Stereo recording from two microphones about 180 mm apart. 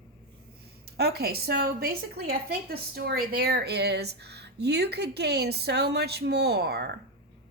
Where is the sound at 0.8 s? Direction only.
60° right (ahead or behind).